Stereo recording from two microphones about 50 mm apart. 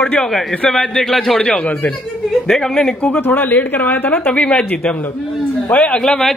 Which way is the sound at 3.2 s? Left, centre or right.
Left.